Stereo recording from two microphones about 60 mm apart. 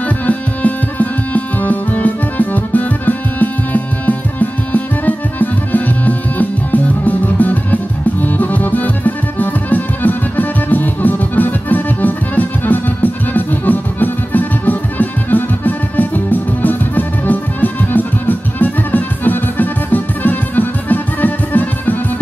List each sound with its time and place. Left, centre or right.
0.3 s music: left